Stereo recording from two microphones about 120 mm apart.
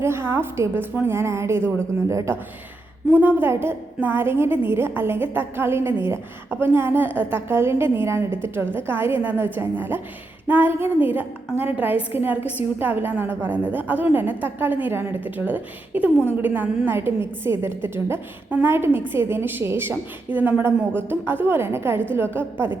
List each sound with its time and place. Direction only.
0.0 s a woman's voice: 20° right (ahead or behind)